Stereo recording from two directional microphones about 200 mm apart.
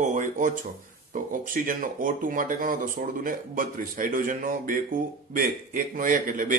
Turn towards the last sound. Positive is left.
turn(degrees=-40)  # may be behind; listen again after turning